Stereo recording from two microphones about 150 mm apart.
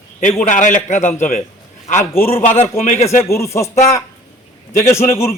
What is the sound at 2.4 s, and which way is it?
Speech, 50° left (ahead or behind).